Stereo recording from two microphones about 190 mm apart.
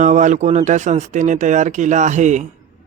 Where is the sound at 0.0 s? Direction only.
40° right (ahead or behind).